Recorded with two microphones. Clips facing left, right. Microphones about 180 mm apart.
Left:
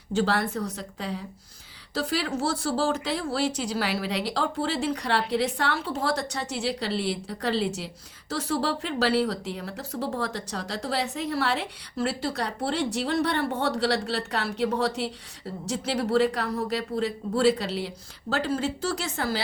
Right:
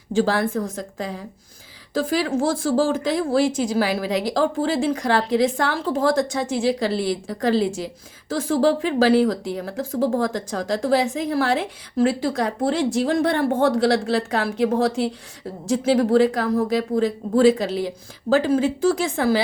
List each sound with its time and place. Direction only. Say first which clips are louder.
0.1 s speech: right 5 dB; 45° right (ahead or behind)